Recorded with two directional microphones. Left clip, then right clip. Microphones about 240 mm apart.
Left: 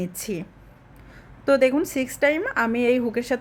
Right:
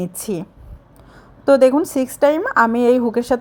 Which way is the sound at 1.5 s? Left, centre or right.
Centre.